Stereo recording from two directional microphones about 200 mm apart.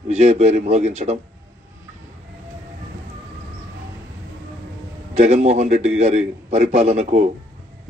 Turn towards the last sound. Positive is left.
turn(degrees=-35)  # may be behind; listen again after turning